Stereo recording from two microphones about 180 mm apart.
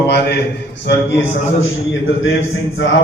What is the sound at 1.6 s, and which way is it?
Speech, 90° left.